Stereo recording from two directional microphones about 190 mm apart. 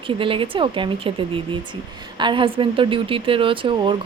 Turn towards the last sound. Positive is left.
turn(degrees=-25)  # may be behind; listen again after turning